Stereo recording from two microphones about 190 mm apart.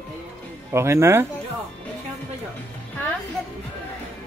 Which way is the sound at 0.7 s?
15° right (ahead or behind).